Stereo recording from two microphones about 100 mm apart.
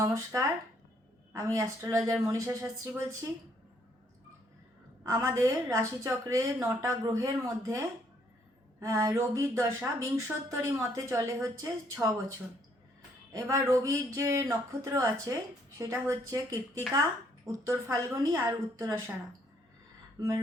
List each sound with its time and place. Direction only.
0.0 s speech: 35° right (ahead or behind)
5.0 s speech: 30° right (ahead or behind)
13.3 s speech: 30° right (ahead or behind)
20.1 s speech: 35° right (ahead or behind)